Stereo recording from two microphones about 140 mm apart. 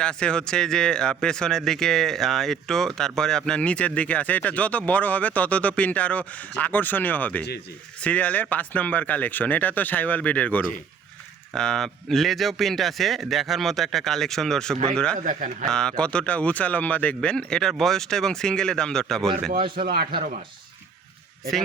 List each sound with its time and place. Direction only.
0.0 s speech: 5° left (ahead or behind)
15.2 s a man's voice: 70° right (ahead or behind)
15.7 s speech: 5° left (ahead or behind)
19.9 s speech: 90° right